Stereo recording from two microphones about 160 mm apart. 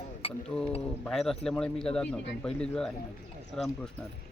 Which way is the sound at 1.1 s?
5° left (ahead or behind).